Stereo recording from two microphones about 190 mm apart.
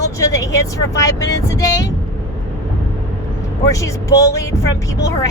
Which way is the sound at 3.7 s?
15° left (ahead or behind).